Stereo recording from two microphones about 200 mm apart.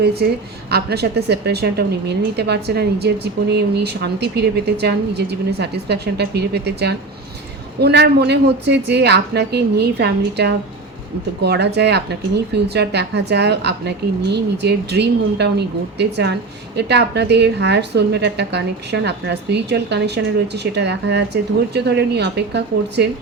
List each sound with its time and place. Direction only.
0.2 s a woman's voice: 50° right (ahead or behind)